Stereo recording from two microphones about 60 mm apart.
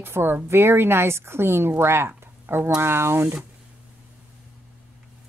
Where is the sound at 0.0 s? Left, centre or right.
Right.